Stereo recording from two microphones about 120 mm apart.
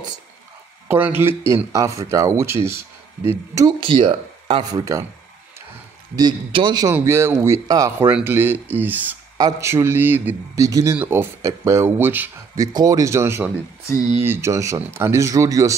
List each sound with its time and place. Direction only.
0.8 s speech: 15° right (ahead or behind)
3.8 s speech: 45° right (ahead or behind)
4.9 s speech: 30° right (ahead or behind)
6.1 s a man's voice: 40° right (ahead or behind)
6.9 s speech: 20° right (ahead or behind)
8.2 s speech: 20° right (ahead or behind)
10.6 s speech: 30° right (ahead or behind)
12.5 s speech: 30° right (ahead or behind)